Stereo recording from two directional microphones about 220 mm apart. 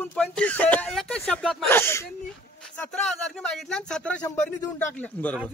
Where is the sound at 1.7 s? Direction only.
10° left (ahead or behind).